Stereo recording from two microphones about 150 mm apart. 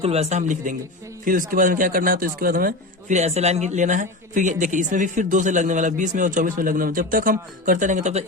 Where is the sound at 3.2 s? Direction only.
45° right (ahead or behind).